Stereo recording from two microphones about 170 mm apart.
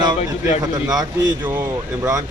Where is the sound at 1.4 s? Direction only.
10° right (ahead or behind).